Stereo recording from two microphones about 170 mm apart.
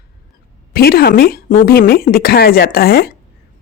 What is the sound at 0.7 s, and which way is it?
Speech, 65° left (ahead or behind).